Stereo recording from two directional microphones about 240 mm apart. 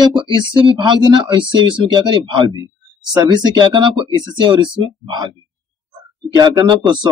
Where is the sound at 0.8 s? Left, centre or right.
Centre.